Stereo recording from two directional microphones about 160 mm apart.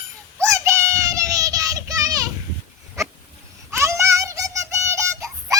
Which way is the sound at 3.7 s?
20° right (ahead or behind).